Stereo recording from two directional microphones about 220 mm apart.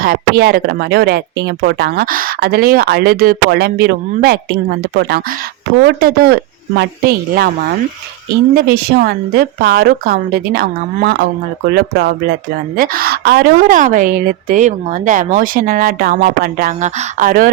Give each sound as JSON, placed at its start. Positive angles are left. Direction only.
{"t": 0.0, "sound": "speech", "side_deg": -45}
{"t": 8.5, "sound": "a woman's voice", "side_deg": -45}